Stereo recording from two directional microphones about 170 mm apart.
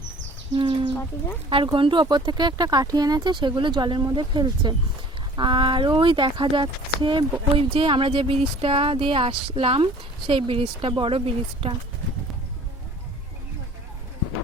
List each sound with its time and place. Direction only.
0.5 s speech: 30° right (ahead or behind)